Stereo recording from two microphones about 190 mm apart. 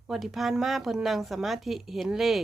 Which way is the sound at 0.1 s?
Centre (ahead or behind).